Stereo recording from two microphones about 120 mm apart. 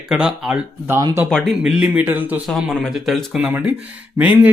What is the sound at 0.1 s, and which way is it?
Speech, 10° right (ahead or behind).